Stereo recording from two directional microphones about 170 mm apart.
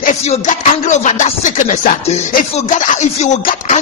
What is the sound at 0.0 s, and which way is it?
Music, 45° left (ahead or behind).